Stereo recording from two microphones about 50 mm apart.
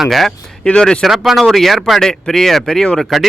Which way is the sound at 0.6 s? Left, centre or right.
Centre.